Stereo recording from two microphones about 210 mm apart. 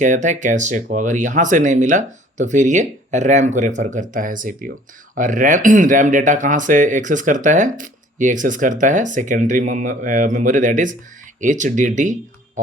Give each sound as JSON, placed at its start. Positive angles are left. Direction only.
{"t": 0.0, "sound": "speech", "side_deg": -35}